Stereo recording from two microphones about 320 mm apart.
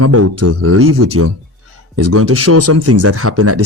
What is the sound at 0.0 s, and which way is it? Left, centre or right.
Speech, right.